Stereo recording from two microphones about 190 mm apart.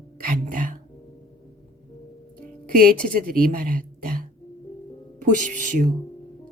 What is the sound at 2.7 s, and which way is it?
A woman's voice, 50° right (ahead or behind).